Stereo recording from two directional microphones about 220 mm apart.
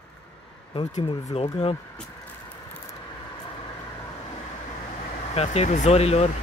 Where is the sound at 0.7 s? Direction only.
25° left (ahead or behind).